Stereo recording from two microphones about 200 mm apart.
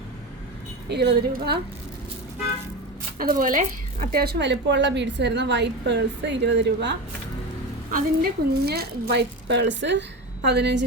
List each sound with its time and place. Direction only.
0.9 s a woman's voice: 55° right (ahead or behind)
3.2 s a woman's voice: 45° right (ahead or behind); by 6.9 s 60° right (ahead or behind)
7.9 s a woman's voice: 45° right (ahead or behind)